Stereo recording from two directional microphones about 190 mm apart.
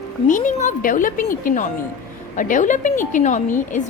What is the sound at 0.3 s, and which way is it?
A woman's voice, 45° left (ahead or behind).